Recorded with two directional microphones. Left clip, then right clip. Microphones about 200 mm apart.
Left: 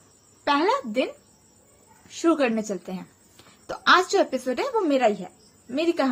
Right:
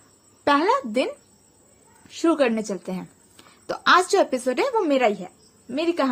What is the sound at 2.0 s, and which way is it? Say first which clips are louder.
A woman's voice: right 2 dB; 30° right (ahead or behind).